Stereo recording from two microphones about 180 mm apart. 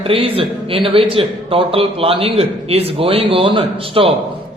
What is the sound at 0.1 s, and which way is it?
A man's voice, 30° right (ahead or behind).